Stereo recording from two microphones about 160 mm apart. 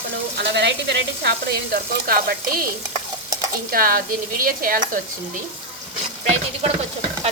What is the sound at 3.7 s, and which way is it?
Speech, 65° right (ahead or behind).